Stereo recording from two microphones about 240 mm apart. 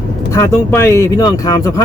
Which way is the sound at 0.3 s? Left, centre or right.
Centre.